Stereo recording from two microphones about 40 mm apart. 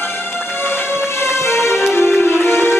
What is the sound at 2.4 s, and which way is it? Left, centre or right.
Music, left.